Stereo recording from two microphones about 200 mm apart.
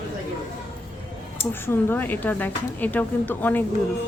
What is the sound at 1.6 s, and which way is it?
Speech, 10° left (ahead or behind).